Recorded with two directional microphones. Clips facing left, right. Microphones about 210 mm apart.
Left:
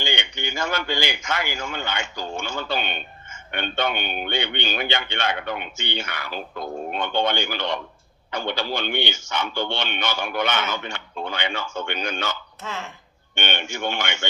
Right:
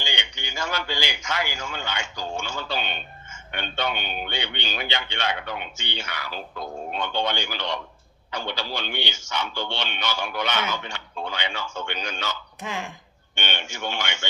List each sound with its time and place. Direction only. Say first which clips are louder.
0.0 s a man's voice: left 6 dB; 55° left (ahead or behind)
12.6 s speech: right 1 dB; 15° right (ahead or behind)
13.3 s a man's voice: left 4 dB; 55° left (ahead or behind)